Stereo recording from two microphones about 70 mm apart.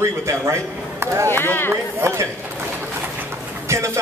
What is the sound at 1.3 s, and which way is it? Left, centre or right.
Speech, left.